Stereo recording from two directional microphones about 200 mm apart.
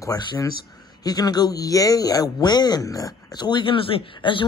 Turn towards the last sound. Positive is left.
turn(degrees=25)  # may be behind; listen again after turning